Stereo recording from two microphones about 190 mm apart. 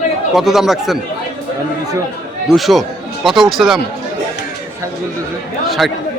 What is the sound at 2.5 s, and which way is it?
Speech, centre (ahead or behind).